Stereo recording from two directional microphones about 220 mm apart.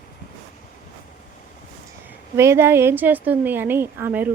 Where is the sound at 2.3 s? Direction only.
10° right (ahead or behind).